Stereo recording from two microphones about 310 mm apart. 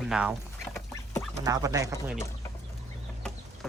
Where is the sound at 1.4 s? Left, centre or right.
Centre.